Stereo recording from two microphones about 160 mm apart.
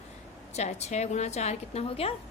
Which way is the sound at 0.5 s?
45° left (ahead or behind).